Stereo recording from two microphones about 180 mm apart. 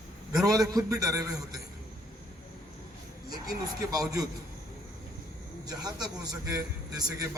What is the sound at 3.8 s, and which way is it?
Speech, 20° right (ahead or behind).